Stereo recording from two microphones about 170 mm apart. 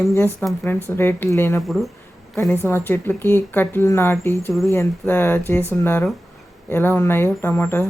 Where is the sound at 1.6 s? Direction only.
Centre (ahead or behind).